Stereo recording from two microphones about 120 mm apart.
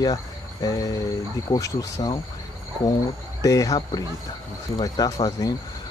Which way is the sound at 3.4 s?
30° left (ahead or behind).